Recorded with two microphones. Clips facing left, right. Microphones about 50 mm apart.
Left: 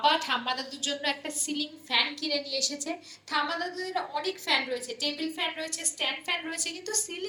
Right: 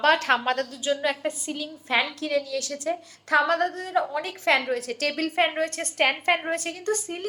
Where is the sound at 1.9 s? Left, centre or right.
Right.